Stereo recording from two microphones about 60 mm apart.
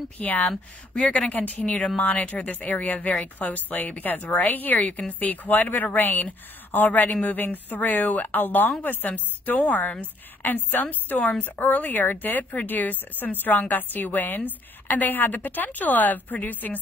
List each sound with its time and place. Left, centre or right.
0.2 s a woman's voice: left